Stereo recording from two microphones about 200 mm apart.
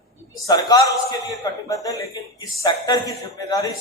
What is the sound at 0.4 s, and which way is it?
A man's voice, 20° left (ahead or behind).